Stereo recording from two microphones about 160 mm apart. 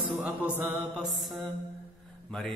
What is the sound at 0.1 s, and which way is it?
Mantra, 5° right (ahead or behind).